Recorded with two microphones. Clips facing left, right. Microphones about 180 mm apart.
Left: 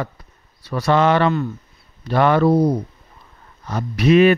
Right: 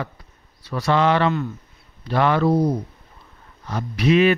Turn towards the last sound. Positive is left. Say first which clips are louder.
# left 4 dB
turn(degrees=50)  # may be behind; listen again after turning